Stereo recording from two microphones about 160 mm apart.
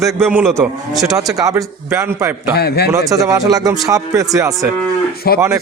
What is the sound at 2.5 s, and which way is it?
Speech, 90° left.